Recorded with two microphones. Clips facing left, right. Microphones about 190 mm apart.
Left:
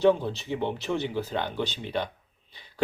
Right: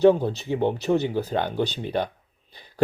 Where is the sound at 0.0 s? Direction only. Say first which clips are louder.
Right 5 dB; 45° right (ahead or behind).